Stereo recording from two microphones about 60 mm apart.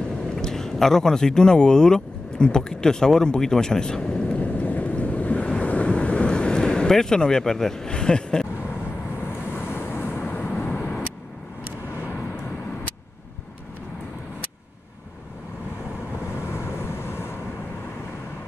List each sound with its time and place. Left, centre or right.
0.4 s speech: centre
5.5 s wind: left
9.2 s vehicle: left
16.3 s vehicle: left